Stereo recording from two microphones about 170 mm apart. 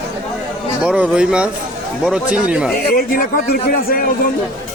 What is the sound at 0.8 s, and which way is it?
Speech, 5° right (ahead or behind).